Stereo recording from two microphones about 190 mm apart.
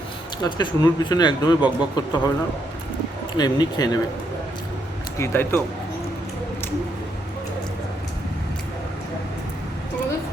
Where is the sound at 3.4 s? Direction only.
20° left (ahead or behind).